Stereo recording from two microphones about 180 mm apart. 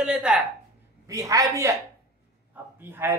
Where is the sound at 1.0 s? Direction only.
20° right (ahead or behind).